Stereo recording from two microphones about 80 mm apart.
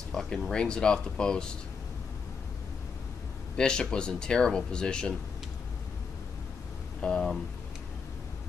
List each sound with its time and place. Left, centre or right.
0.1 s speech: centre
3.5 s speech: centre
7.0 s speech: centre